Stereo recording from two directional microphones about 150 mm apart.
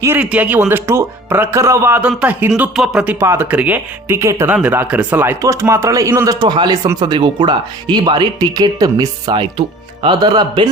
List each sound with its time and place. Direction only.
0.0 s speech: 10° right (ahead or behind); by 10.7 s 30° right (ahead or behind)